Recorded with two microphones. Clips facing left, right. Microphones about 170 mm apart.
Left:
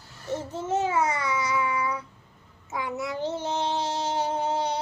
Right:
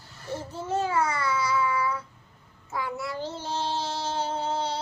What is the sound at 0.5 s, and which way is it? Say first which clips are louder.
Child singing: left 1 dB; 20° left (ahead or behind).